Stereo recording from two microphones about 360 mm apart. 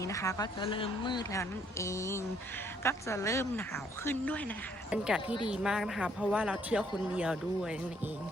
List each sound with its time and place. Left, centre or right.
0.0 s speech: centre